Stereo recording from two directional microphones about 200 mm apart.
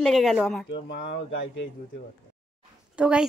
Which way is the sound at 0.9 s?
55° left (ahead or behind).